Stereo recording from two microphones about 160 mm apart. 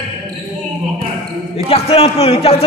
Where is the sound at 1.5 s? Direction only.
40° left (ahead or behind).